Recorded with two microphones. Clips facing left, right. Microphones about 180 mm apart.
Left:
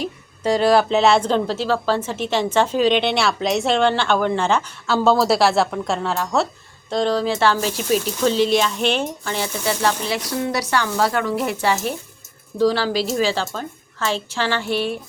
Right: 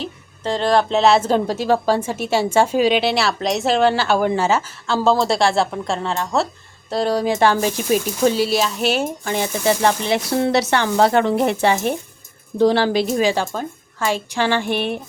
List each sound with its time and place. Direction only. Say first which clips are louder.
0.0 s a woman's voice: left 3 dB; 10° left (ahead or behind); by 14.7 s 15° right (ahead or behind)
14.7 s speech: right 1 dB; 60° right (ahead or behind)